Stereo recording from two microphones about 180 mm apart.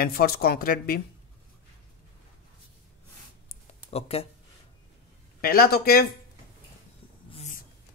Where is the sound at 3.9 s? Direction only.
35° left (ahead or behind).